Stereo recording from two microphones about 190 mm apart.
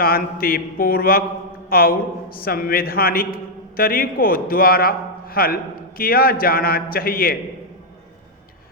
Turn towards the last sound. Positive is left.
turn(degrees=50)  # may be behind; listen again after turning